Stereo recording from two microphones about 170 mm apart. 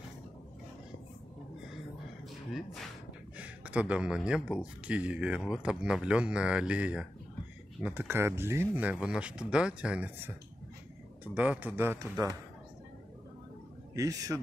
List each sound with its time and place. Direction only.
2.5 s speech: centre (ahead or behind)
11.3 s speech: 10° right (ahead or behind)
13.9 s a man's voice: 20° right (ahead or behind)